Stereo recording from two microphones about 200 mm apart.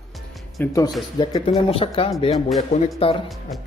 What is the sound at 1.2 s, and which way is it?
Speech, 25° left (ahead or behind).